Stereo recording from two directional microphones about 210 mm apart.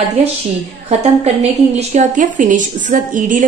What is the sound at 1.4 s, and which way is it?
A woman's voice, 30° right (ahead or behind).